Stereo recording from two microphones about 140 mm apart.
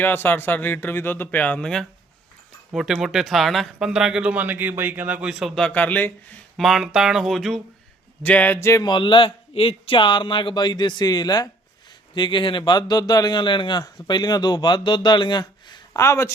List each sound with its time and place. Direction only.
0.0 s speech: 15° left (ahead or behind)
6.6 s speech: centre (ahead or behind)
8.6 s a sound: 20° left (ahead or behind)
8.9 s a man's voice: 35° left (ahead or behind)
15.9 s speech: 20° left (ahead or behind)